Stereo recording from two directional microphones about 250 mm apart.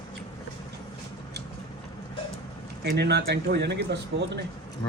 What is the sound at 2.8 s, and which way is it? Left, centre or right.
Speech, right.